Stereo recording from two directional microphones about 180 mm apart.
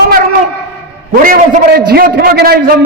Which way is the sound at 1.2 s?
50° right (ahead or behind).